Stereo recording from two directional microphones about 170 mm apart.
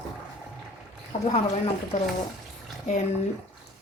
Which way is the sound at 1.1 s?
40° left (ahead or behind).